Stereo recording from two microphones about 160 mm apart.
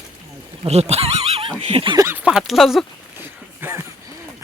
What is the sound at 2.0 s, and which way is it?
Speech, 15° right (ahead or behind).